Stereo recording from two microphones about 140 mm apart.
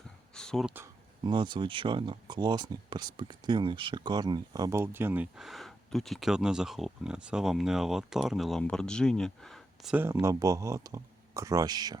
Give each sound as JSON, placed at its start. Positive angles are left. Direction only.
{"t": 0.3, "sound": "a sound", "side_deg": 5}
{"t": 1.2, "sound": "speech", "side_deg": -35}
{"t": 9.9, "sound": "speech", "side_deg": -15}